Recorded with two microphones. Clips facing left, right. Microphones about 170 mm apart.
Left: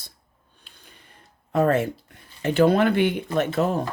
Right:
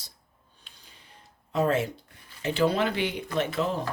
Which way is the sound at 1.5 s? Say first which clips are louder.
Left 5 dB; 55° left (ahead or behind).